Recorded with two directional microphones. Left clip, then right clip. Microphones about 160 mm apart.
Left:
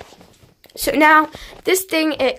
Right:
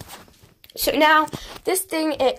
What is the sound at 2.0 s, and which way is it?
Speech, 10° left (ahead or behind).